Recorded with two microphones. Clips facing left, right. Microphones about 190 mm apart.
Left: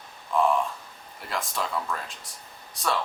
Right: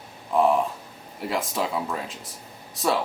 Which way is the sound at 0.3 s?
35° right (ahead or behind).